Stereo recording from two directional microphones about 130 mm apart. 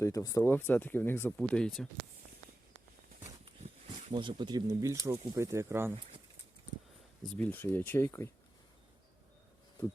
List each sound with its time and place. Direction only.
0.0 s speech: 25° left (ahead or behind)
1.4 s speech: 5° left (ahead or behind)
4.1 s speech: 35° right (ahead or behind); by 5.9 s 20° right (ahead or behind)
7.3 s speech: 10° left (ahead or behind)